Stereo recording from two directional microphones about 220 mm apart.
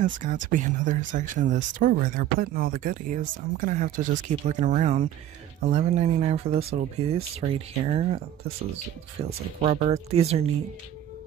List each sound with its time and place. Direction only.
0.2 s speech: 35° right (ahead or behind)
9.6 s speech: 25° right (ahead or behind)